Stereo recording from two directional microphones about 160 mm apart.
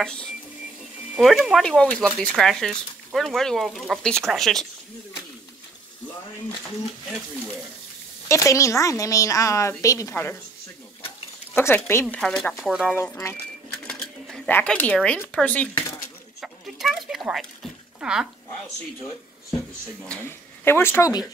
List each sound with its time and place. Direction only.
0.0 s speech: 5° left (ahead or behind)
8.3 s a woman's voice: 20° left (ahead or behind)
11.5 s speech: 15° left (ahead or behind)
12.2 s speech: 5° left (ahead or behind)
12.9 s speech: 15° left (ahead or behind)
13.8 s sewing machine: 5° left (ahead or behind)
15.3 s speech: 10° left (ahead or behind)
16.3 s a sound: centre (ahead or behind)
18.0 s speech: 5° right (ahead or behind)
20.0 s speech: 15° left (ahead or behind)